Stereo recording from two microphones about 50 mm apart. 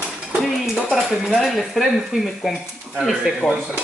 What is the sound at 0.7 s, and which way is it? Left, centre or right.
Speech, centre.